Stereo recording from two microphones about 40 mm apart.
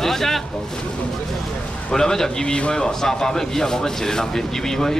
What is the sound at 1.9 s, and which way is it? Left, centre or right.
A man's voice, centre.